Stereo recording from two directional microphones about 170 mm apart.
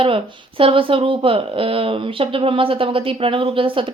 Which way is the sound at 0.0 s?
30° right (ahead or behind).